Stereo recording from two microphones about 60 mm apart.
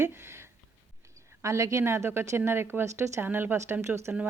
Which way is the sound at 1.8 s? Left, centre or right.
Right.